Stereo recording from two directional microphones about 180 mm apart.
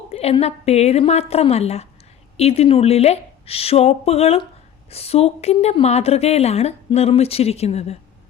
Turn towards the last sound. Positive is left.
turn(degrees=35)  # may be behind; listen again after turning